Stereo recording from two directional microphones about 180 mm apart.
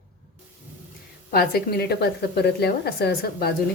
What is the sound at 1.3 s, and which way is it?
A woman's voice, 60° left (ahead or behind).